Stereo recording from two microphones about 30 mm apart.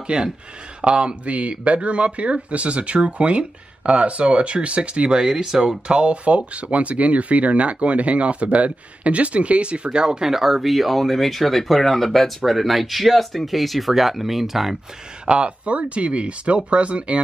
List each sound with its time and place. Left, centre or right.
0.1 s speech: right
1.2 s speech: right
5.9 s speech: right
10.2 s speech: centre
12.4 s speech: centre
15.2 s speech: right